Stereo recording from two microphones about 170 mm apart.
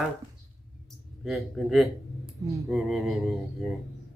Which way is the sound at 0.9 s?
Centre (ahead or behind).